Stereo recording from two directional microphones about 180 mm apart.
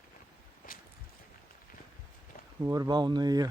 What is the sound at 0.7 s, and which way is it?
Walk, 50° left (ahead or behind).